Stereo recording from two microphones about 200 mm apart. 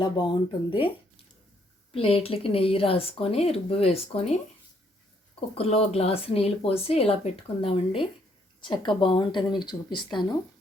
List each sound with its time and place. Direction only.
0.0 s a woman's voice: 20° left (ahead or behind)
1.9 s a woman's voice: 30° left (ahead or behind)
5.5 s a woman's voice: 30° left (ahead or behind)